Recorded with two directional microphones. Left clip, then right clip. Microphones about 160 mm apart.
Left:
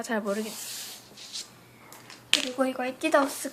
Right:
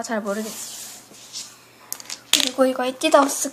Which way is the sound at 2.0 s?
35° right (ahead or behind).